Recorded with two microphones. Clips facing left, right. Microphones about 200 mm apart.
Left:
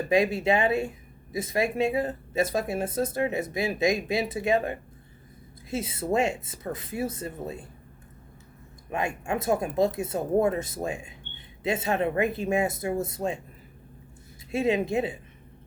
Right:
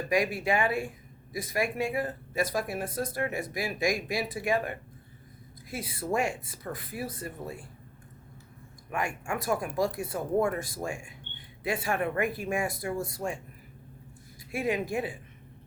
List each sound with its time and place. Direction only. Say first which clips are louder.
0.1 s speech: left 4 dB; 25° left (ahead or behind)
8.9 s speech: left 4 dB; 20° left (ahead or behind)
14.5 s speech: left 5 dB; 25° left (ahead or behind)